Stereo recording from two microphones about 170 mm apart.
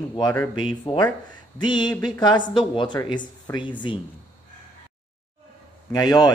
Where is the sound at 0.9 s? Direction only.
25° left (ahead or behind).